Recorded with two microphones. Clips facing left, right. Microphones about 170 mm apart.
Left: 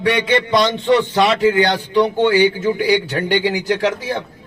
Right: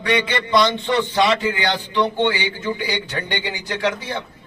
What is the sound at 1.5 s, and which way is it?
A man's voice, 45° left (ahead or behind).